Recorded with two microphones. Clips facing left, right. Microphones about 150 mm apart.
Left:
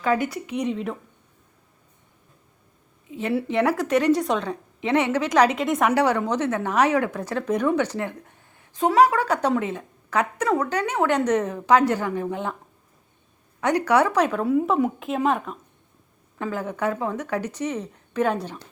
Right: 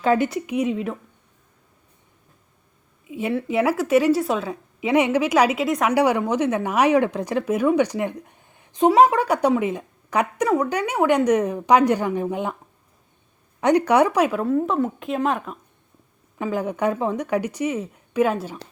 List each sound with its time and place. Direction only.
0.0 s speech: 25° right (ahead or behind)
0.5 s a woman's voice: 5° right (ahead or behind)
3.1 s a sound: 10° right (ahead or behind)
3.4 s a woman's voice: 5° right (ahead or behind)
5.9 s a woman's voice: 10° right (ahead or behind)
13.6 s a woman's voice: 20° right (ahead or behind)
14.4 s a woman's voice: 5° left (ahead or behind)
16.4 s a woman's voice: 15° right (ahead or behind)